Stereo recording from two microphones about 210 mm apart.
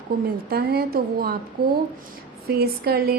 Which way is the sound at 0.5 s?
45° right (ahead or behind).